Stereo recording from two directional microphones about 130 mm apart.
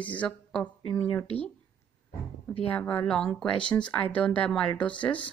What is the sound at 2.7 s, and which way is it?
Speech, 10° left (ahead or behind).